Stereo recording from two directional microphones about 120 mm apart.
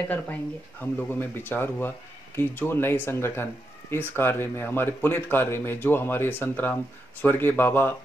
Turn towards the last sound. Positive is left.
turn(degrees=15)  # may be behind; listen again after turning